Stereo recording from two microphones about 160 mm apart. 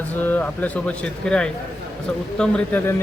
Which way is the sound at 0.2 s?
10° left (ahead or behind).